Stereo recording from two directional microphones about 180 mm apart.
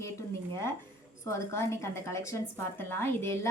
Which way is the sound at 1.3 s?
15° left (ahead or behind).